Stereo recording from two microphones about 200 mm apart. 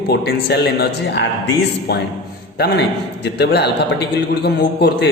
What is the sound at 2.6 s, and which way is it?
A man's voice, 55° left (ahead or behind).